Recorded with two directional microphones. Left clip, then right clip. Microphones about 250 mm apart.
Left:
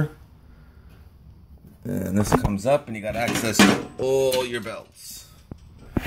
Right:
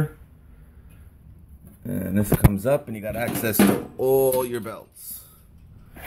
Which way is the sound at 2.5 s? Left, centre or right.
Centre.